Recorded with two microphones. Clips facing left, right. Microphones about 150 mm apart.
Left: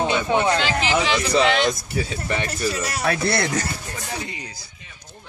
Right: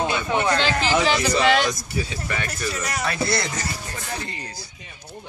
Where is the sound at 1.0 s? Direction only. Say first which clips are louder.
Right 2 dB; 40° right (ahead or behind).